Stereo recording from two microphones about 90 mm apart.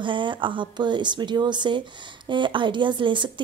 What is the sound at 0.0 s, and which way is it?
Speech, 65° right (ahead or behind).